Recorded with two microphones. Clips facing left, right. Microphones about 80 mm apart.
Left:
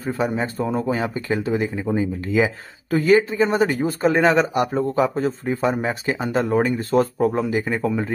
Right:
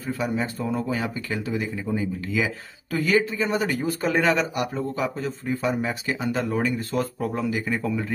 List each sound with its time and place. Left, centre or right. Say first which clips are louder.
0.0 s speech: left 4 dB; left